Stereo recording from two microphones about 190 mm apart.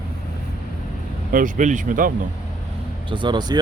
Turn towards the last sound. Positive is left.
turn(degrees=-20)  # may be behind; listen again after turning